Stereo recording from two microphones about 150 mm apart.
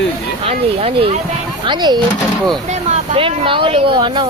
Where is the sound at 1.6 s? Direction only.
30° right (ahead or behind).